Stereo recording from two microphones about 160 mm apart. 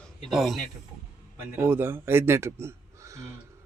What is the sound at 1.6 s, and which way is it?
A man's voice, 15° right (ahead or behind).